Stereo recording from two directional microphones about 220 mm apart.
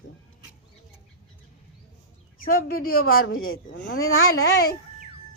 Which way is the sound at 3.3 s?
70° left (ahead or behind).